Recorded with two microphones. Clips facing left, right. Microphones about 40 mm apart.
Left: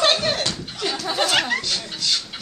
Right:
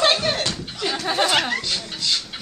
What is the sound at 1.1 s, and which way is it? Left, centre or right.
Speech, centre.